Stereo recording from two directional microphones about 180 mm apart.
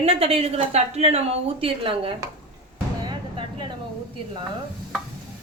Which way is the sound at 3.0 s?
25° right (ahead or behind).